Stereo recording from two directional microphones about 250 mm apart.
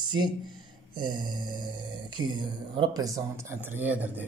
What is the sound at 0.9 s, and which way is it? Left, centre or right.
Speech, centre.